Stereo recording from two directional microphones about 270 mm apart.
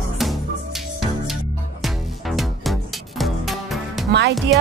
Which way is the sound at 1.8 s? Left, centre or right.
Centre.